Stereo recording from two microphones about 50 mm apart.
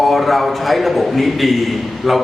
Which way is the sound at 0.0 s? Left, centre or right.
Centre.